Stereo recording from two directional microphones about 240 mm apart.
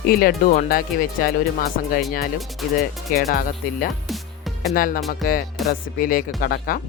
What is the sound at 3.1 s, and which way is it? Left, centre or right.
Speech, left.